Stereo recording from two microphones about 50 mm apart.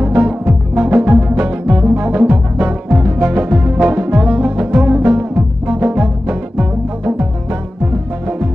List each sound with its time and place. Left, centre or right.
0.0 s music: right